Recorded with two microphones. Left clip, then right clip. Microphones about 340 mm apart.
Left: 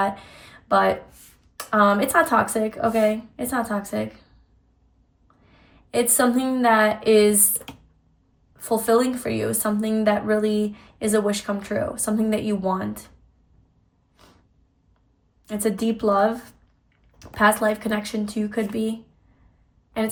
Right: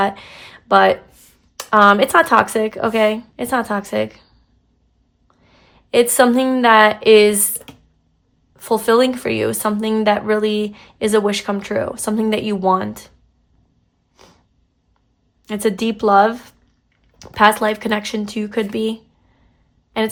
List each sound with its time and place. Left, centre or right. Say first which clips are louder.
0.0 s a woman's voice: right 5 dB; centre
5.4 s speech: right 5 dB; centre
7.5 s speech: even; centre
8.5 s a woman's voice: right 5 dB; centre
15.4 s a woman's voice: right 5 dB; centre